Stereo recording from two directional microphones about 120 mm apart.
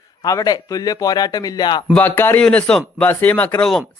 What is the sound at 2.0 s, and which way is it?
A man's voice, 20° left (ahead or behind).